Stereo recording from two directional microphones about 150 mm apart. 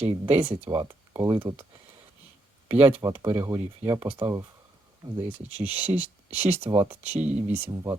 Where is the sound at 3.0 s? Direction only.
20° right (ahead or behind).